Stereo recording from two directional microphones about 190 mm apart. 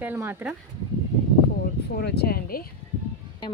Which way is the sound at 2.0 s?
55° left (ahead or behind).